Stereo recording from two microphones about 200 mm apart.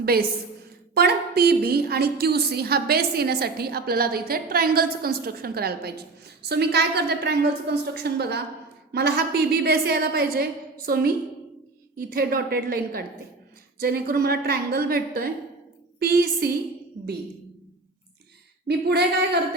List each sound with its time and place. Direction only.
0.0 s a woman's voice: 50° right (ahead or behind)
18.7 s speech: 55° right (ahead or behind)